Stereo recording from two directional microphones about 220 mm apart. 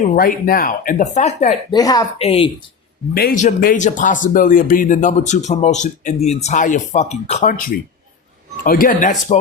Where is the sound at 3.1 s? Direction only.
40° left (ahead or behind).